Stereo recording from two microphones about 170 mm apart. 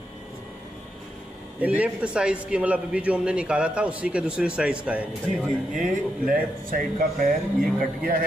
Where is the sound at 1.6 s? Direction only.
10° right (ahead or behind).